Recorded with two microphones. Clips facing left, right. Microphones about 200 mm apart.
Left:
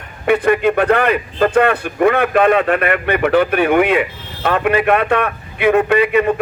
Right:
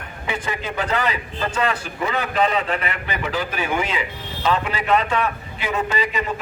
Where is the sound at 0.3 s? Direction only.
60° left (ahead or behind).